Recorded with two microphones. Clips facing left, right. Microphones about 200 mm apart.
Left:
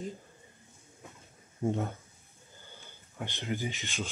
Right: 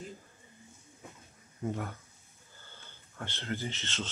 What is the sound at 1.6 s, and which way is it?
Speech, 25° left (ahead or behind).